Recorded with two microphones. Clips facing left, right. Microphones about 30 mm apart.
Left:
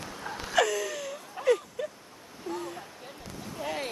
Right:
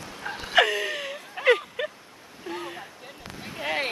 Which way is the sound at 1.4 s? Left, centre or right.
Right.